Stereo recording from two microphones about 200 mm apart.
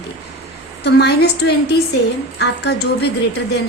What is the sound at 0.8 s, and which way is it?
Speech, 55° left (ahead or behind).